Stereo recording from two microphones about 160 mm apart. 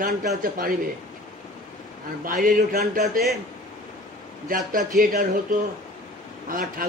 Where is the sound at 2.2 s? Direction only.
60° right (ahead or behind).